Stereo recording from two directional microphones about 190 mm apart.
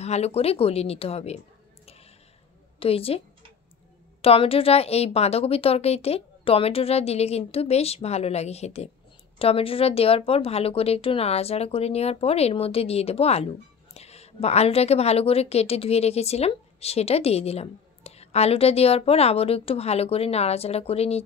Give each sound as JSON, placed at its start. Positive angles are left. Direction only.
{"t": 0.0, "sound": "a woman's voice", "side_deg": 35}
{"t": 2.8, "sound": "a woman's voice", "side_deg": 30}
{"t": 4.2, "sound": "a woman's voice", "side_deg": 30}